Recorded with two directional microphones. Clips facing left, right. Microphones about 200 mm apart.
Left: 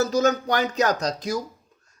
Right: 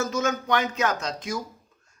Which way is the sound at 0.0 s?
35° left (ahead or behind).